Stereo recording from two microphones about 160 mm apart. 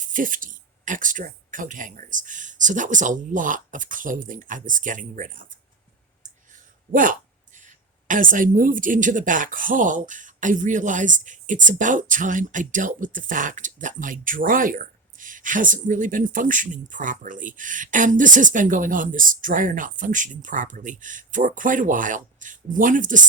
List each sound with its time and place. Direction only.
0.0 s speech: 55° right (ahead or behind)
6.9 s speech: 55° right (ahead or behind)